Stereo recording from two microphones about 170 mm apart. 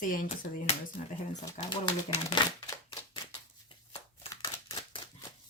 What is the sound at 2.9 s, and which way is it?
Typewriter, 30° left (ahead or behind).